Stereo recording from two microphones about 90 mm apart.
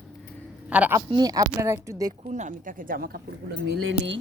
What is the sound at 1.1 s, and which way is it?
Speech, 45° right (ahead or behind).